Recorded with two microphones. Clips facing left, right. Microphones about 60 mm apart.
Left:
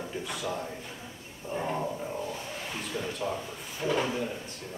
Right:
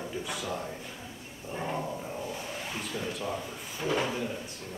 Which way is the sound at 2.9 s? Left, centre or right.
Centre.